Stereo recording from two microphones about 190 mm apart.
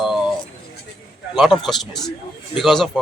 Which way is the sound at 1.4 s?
Centre (ahead or behind).